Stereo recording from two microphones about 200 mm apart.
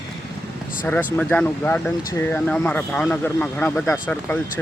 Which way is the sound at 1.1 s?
5° left (ahead or behind).